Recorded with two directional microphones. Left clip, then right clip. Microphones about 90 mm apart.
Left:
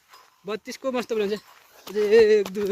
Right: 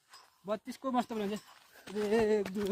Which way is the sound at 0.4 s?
50° right (ahead or behind).